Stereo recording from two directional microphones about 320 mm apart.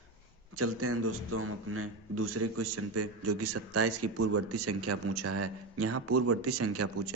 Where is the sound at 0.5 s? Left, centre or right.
Right.